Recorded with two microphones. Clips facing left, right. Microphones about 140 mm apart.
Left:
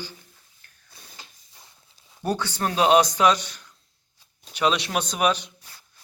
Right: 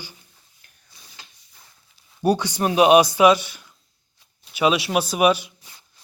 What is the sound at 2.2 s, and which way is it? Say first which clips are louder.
Speech: right 6 dB; 15° right (ahead or behind).